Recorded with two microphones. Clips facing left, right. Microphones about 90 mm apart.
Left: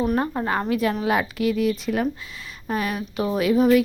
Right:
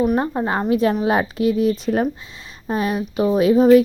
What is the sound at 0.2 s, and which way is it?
Speech, 25° right (ahead or behind).